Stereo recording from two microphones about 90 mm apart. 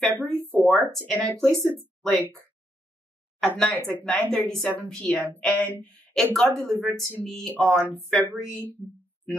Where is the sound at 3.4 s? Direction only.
10° left (ahead or behind).